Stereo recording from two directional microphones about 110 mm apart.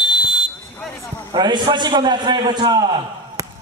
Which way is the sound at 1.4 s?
45° right (ahead or behind).